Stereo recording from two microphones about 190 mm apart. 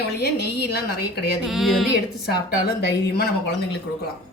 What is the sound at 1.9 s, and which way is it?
A woman's voice, 55° left (ahead or behind).